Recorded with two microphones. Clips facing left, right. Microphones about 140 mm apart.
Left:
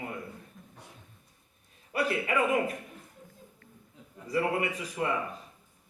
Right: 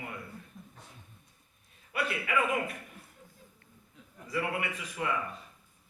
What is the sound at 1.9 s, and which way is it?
Speech, 35° left (ahead or behind).